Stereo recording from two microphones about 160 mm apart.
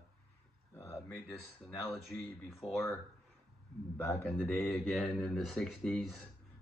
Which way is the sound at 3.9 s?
15° left (ahead or behind).